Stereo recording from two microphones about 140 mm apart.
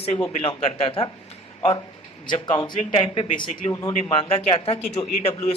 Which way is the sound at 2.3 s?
35° left (ahead or behind).